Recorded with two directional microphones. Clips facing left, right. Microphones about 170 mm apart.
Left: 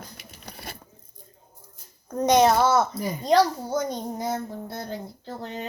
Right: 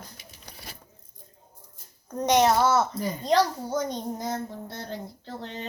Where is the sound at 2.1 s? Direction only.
10° left (ahead or behind).